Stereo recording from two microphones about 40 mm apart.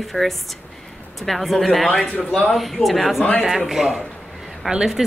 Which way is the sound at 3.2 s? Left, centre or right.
Left.